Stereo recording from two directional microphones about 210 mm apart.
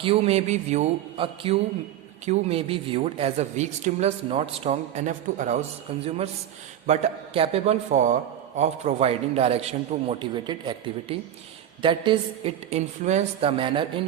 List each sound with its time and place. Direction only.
0.0 s a woman's voice: 30° right (ahead or behind)